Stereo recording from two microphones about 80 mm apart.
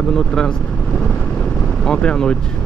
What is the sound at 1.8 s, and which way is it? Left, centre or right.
Speech, centre.